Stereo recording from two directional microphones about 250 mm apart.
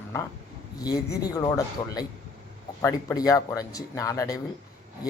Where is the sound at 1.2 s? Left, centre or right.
Centre.